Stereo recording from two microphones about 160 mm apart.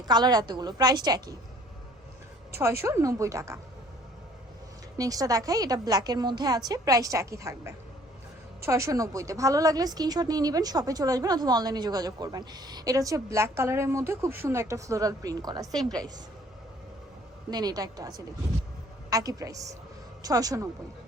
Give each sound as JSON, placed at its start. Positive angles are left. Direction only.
{"t": 0.0, "sound": "a woman's voice", "side_deg": -25}
{"t": 2.8, "sound": "a woman's voice", "side_deg": -20}
{"t": 4.9, "sound": "a woman's voice", "side_deg": -20}
{"t": 17.5, "sound": "a woman's voice", "side_deg": -25}